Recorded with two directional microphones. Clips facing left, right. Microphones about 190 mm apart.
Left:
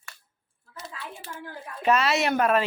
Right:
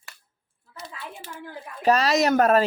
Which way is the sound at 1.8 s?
35° right (ahead or behind).